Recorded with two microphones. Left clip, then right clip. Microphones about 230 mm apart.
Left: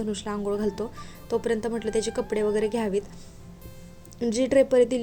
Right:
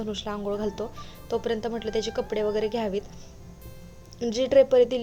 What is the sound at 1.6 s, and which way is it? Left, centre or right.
Speech, left.